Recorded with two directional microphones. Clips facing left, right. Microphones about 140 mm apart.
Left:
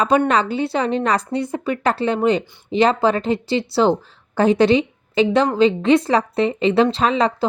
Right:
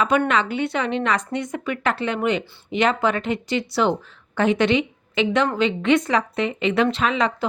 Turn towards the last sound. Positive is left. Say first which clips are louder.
# left 3 dB
turn(degrees=35)  # may be behind; listen again after turning